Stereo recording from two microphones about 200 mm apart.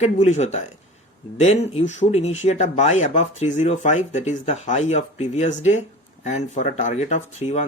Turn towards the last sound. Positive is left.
turn(degrees=35)  # may be behind; listen again after turning